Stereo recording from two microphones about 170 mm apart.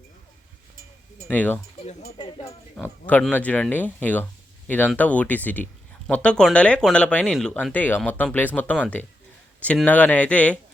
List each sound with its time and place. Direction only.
1.3 s speech: 10° left (ahead or behind)
2.1 s a sound: 30° left (ahead or behind)
2.7 s speech: 10° left (ahead or behind)